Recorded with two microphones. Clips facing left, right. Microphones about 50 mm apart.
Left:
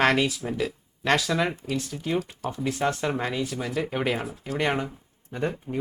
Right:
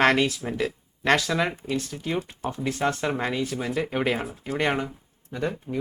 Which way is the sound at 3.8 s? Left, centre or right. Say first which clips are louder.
Right 1 dB; centre.